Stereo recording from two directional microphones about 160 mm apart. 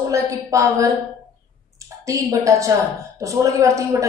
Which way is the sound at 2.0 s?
20° right (ahead or behind).